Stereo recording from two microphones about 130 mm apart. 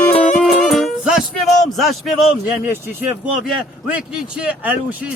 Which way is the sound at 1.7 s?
Centre (ahead or behind).